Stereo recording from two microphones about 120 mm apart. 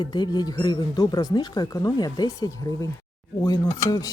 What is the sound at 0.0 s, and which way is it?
Speech, 35° left (ahead or behind).